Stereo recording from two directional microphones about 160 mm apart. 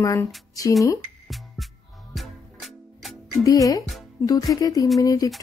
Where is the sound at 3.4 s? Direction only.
20° left (ahead or behind).